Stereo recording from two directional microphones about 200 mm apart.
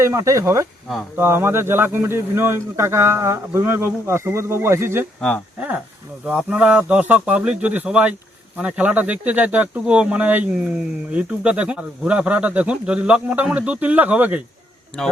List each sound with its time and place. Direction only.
0.0 s speech: 15° right (ahead or behind)